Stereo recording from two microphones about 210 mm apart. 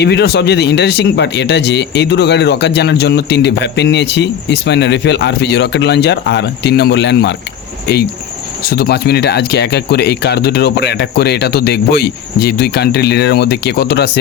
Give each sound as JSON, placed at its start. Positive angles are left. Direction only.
{"t": 0.0, "sound": "speech", "side_deg": 50}
{"t": 8.6, "sound": "speech", "side_deg": 50}